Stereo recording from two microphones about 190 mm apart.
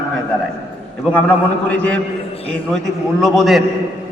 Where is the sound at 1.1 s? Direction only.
5° left (ahead or behind).